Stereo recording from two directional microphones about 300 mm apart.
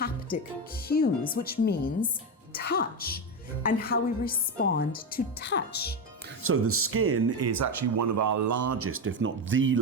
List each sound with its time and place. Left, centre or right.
0.9 s a woman's voice: left
6.4 s speech: right